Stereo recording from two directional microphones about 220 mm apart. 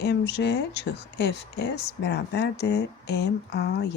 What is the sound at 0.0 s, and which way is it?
Speech, 50° left (ahead or behind).